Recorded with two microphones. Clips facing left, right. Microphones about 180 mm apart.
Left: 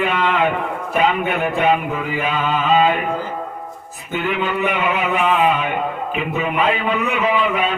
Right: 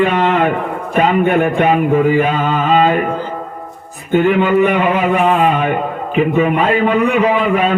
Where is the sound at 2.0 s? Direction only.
45° right (ahead or behind).